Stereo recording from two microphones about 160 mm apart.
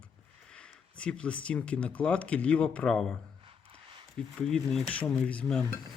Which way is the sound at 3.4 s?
35° right (ahead or behind).